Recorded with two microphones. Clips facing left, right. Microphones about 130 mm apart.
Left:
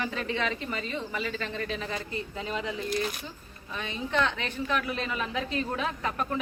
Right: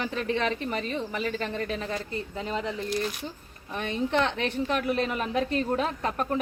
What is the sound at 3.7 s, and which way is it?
A woman's voice, 55° right (ahead or behind).